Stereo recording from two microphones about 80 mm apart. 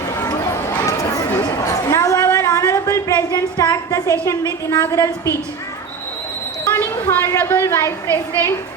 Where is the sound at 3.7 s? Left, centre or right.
Left.